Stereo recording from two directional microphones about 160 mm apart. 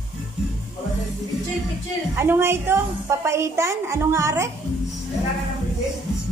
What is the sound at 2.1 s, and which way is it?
A woman's voice, 15° right (ahead or behind).